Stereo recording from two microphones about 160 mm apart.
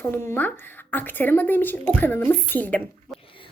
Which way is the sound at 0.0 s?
15° left (ahead or behind).